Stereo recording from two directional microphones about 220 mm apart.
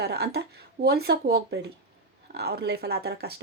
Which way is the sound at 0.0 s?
50° right (ahead or behind).